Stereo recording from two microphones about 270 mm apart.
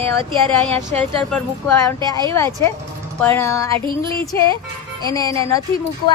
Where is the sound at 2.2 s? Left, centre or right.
Centre.